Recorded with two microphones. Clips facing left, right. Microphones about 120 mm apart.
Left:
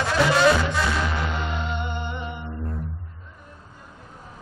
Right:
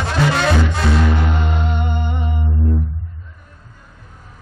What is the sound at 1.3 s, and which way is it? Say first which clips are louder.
Humming: right 5 dB; 55° right (ahead or behind).